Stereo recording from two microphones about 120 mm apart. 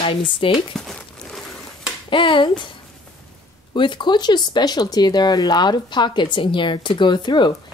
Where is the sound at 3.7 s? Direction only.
40° left (ahead or behind).